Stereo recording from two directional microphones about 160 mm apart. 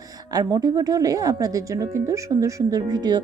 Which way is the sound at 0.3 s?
25° right (ahead or behind).